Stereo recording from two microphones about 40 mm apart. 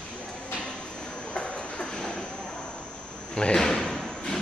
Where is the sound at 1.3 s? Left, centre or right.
Left.